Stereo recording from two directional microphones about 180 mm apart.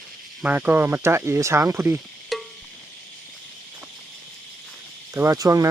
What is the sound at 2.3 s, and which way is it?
Cricket, centre (ahead or behind).